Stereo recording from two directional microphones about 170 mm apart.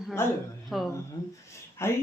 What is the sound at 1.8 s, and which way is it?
Speech, 15° left (ahead or behind).